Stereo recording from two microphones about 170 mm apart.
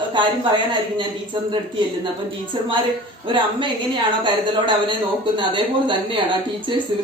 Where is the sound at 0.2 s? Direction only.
30° right (ahead or behind).